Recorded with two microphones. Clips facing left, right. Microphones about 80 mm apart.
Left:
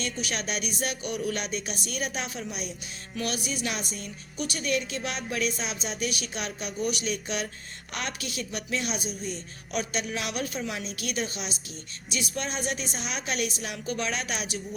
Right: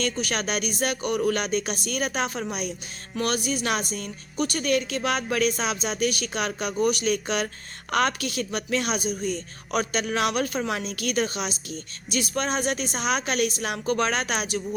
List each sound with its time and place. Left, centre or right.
0.0 s speech: right